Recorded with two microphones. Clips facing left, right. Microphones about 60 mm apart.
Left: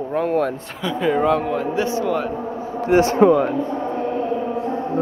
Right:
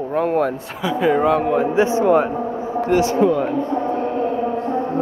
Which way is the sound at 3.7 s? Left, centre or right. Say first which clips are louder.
Right 2 dB; centre.